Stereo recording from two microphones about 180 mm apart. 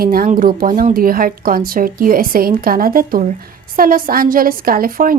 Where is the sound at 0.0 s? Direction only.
55° right (ahead or behind).